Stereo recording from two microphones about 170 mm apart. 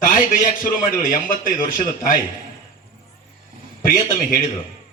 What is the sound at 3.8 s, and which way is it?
Speech, 55° left (ahead or behind).